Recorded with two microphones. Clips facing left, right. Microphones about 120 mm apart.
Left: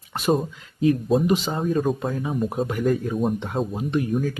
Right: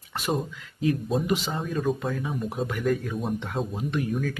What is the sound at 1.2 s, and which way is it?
Speech, 25° left (ahead or behind).